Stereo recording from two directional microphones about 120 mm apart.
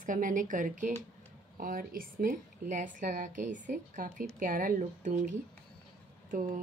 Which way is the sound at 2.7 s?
90° right.